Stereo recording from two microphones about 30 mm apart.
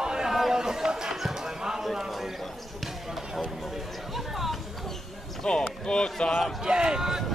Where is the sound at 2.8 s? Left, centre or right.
Centre.